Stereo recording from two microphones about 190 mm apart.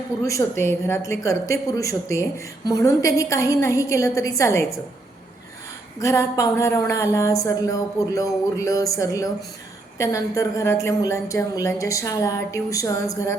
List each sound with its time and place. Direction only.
0.3 s a woman's voice: 15° left (ahead or behind)
6.0 s a woman's voice: 15° left (ahead or behind)